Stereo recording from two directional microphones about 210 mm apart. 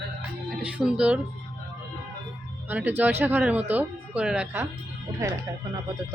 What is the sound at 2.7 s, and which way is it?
Speech, 10° right (ahead or behind).